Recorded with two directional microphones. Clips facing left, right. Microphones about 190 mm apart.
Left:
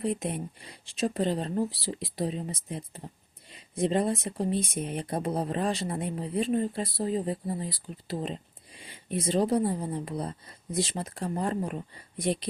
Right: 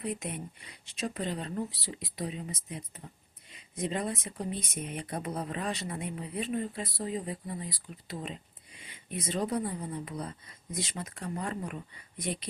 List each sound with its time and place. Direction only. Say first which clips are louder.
0.0 s speech: left 6 dB; 30° left (ahead or behind)